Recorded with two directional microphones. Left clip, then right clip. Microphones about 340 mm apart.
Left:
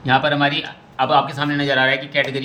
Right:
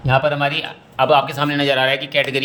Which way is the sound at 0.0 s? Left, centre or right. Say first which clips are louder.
Even; right.